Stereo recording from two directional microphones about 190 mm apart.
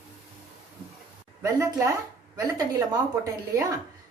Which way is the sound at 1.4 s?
15° right (ahead or behind).